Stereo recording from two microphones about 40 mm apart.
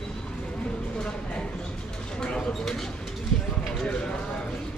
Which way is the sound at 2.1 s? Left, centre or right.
Left.